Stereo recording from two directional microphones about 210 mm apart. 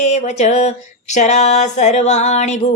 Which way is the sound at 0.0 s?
30° left (ahead or behind).